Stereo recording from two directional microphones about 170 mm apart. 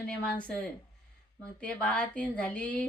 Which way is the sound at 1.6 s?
5° left (ahead or behind).